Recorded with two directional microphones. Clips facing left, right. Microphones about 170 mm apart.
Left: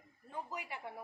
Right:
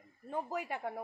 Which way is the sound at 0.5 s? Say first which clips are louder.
Right 7 dB; 50° right (ahead or behind).